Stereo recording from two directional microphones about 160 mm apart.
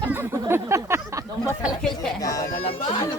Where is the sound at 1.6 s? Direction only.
Centre (ahead or behind).